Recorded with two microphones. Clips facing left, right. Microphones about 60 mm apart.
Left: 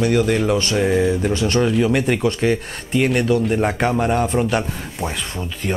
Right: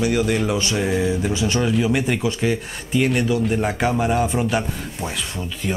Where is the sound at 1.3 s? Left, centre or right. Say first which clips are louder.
Left 3 dB; centre.